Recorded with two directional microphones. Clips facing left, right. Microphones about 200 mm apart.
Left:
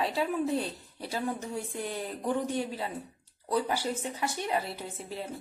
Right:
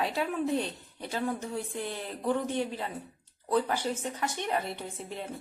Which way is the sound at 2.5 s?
40° left (ahead or behind).